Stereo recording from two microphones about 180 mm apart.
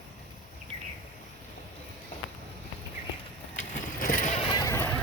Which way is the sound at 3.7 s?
50° left (ahead or behind).